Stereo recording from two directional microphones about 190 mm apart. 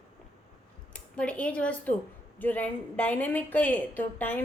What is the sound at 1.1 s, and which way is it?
A woman's voice, 5° left (ahead or behind).